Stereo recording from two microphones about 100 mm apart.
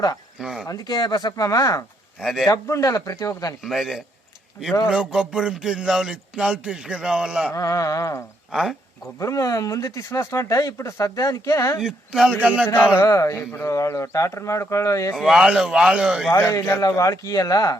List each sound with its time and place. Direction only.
0.3 s speech: 5° right (ahead or behind)
0.7 s speech: 40° left (ahead or behind)
2.2 s a man's voice: centre (ahead or behind)
2.5 s speech: 30° left (ahead or behind)
3.6 s a man's voice: centre (ahead or behind)
7.5 s speech: 35° left (ahead or behind)
11.8 s speech: 5° right (ahead or behind)
13.0 s speech: 30° left (ahead or behind)
15.1 s speech: 5° right (ahead or behind)
16.3 s speech: 30° left (ahead or behind)